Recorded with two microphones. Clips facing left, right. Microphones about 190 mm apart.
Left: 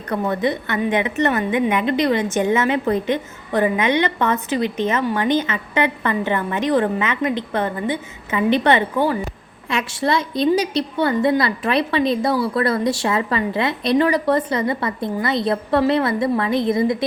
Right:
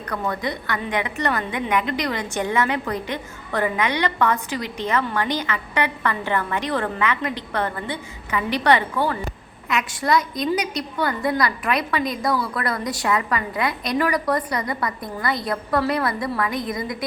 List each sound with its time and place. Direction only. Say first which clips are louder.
0.1 s a woman's voice: left 6 dB; 25° left (ahead or behind)